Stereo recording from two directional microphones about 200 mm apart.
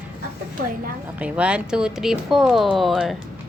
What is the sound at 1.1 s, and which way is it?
Speech, 5° right (ahead or behind).